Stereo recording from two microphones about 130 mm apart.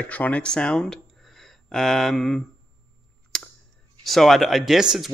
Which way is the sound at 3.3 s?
5° left (ahead or behind).